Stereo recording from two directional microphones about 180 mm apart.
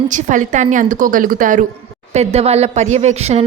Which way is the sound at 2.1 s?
35° right (ahead or behind).